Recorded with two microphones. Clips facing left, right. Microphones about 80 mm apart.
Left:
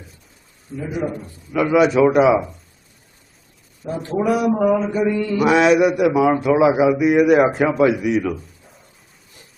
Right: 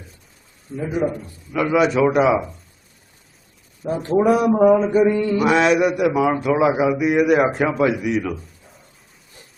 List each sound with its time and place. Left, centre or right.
0.7 s a man's voice: centre
3.8 s a man's voice: right
4.5 s mantra: centre
4.9 s a man's voice: right
5.4 s a man's voice: centre